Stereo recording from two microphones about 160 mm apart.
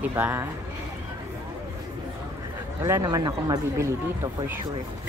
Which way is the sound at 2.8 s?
20° right (ahead or behind).